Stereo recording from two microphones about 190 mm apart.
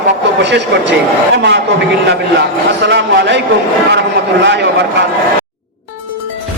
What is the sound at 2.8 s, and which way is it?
Speech, 65° right (ahead or behind).